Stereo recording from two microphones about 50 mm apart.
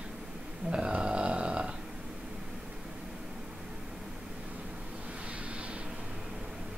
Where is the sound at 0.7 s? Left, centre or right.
Right.